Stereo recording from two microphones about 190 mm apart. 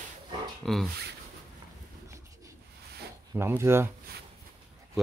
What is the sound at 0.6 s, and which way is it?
Speech, centre (ahead or behind).